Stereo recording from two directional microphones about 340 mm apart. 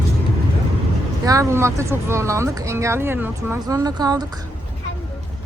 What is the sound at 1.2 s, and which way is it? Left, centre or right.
Speech, centre.